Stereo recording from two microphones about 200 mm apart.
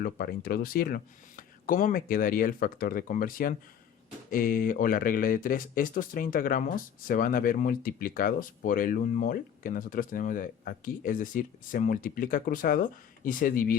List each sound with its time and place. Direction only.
0.0 s speech: 50° left (ahead or behind)